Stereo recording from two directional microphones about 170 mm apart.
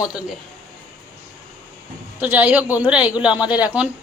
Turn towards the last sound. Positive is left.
turn(degrees=-10)  # may be behind; listen again after turning